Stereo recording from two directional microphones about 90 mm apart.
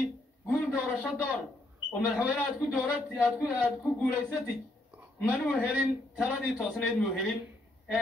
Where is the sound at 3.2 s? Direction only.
30° left (ahead or behind).